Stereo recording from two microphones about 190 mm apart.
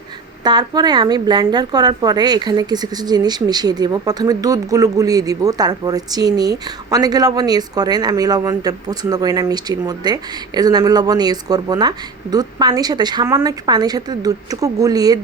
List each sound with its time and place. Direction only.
0.4 s a woman's voice: 20° right (ahead or behind)